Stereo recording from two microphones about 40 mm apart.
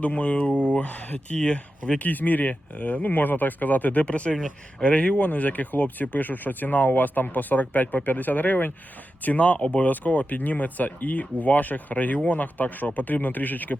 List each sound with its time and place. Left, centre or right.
0.0 s speech: left
4.0 s speech: left
9.9 s speech: left